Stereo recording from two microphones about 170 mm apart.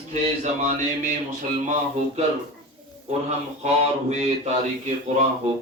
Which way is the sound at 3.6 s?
40° right (ahead or behind).